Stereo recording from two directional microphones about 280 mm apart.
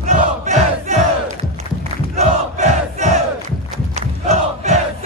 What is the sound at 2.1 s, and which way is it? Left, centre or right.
Crowd, right.